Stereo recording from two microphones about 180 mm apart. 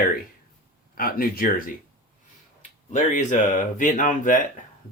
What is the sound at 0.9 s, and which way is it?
Speech, 55° left (ahead or behind).